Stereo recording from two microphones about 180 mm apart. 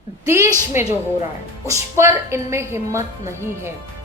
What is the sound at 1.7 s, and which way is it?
A woman's voice, 15° right (ahead or behind).